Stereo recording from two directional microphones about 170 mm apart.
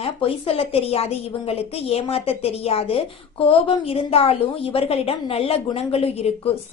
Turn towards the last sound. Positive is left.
turn(degrees=35)  # may be behind; listen again after turning